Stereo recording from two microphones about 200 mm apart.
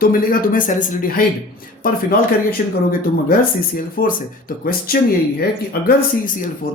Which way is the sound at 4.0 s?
45° left (ahead or behind).